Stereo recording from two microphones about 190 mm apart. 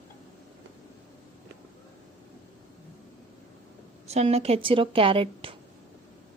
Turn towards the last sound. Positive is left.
turn(degrees=-30)  # may be behind; listen again after turning